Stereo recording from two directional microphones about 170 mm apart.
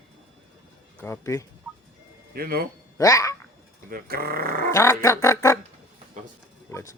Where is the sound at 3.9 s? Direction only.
65° right (ahead or behind).